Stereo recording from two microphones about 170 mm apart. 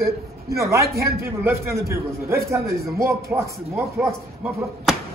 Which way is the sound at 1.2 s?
15° right (ahead or behind).